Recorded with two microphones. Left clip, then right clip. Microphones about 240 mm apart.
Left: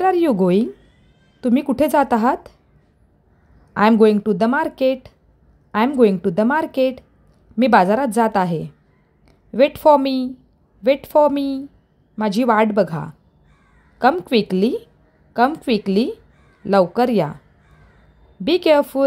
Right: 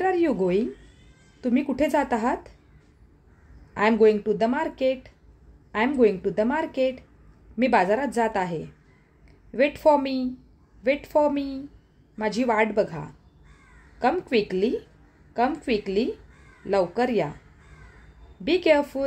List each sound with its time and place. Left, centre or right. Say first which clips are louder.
0.0 s a woman's voice: left 6 dB; left
3.7 s a woman's voice: left 5 dB; left
18.4 s a woman's voice: left 6 dB; left